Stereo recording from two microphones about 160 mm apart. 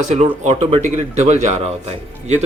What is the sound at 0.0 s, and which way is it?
Speech, 45° right (ahead or behind).